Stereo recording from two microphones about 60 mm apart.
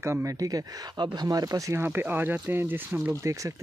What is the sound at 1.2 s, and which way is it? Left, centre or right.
Speech, right.